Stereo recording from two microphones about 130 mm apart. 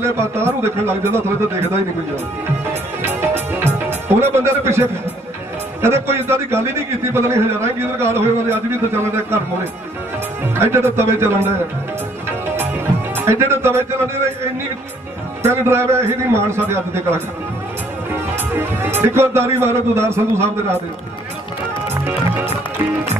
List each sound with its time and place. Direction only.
0.0 s a man's voice: 20° right (ahead or behind)
3.0 s music: 20° right (ahead or behind)
5.8 s a man's voice: 20° right (ahead or behind)
10.4 s a man's voice: 20° right (ahead or behind)
12.3 s music: 20° right (ahead or behind)
15.4 s a man's voice: 20° right (ahead or behind)
18.3 s speech: 20° right (ahead or behind)